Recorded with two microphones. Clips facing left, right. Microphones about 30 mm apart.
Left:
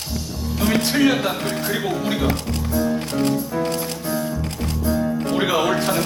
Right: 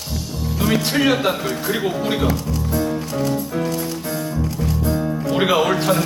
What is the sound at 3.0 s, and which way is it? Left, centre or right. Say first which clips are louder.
Music: left 1 dB; left.